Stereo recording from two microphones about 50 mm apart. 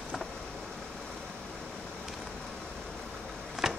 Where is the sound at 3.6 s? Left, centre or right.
Centre.